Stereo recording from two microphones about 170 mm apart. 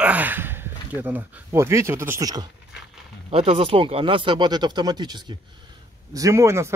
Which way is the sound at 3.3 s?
35° right (ahead or behind).